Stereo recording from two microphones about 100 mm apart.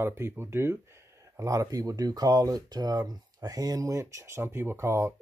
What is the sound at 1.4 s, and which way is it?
Speech, 35° right (ahead or behind).